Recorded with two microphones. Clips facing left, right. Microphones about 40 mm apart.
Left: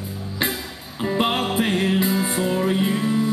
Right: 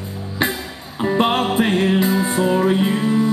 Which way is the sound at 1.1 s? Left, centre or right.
Centre.